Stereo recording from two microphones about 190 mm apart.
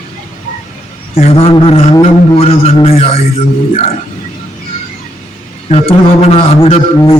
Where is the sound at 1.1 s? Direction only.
30° left (ahead or behind).